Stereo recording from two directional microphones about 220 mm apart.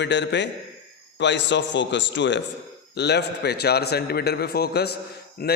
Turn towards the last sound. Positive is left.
turn(degrees=45)  # may be behind; listen again after turning